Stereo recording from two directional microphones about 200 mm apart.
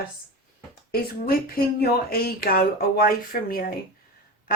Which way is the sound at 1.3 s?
50° left (ahead or behind).